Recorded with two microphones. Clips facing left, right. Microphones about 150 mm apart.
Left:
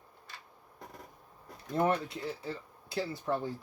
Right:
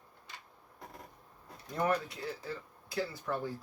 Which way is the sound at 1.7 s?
25° left (ahead or behind).